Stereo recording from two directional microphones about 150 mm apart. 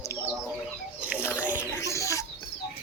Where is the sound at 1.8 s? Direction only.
20° left (ahead or behind).